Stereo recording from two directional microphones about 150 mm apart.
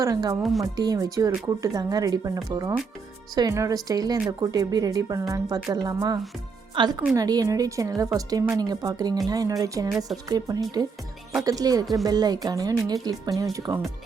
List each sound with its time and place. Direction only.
0.0 s speech: 25° right (ahead or behind)